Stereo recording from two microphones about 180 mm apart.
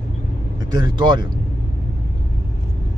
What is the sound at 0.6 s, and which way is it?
Speech, 25° right (ahead or behind).